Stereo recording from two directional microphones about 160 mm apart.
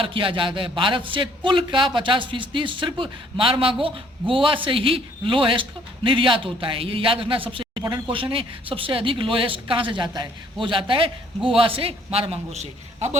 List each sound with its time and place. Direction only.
0.0 s speech: 30° right (ahead or behind)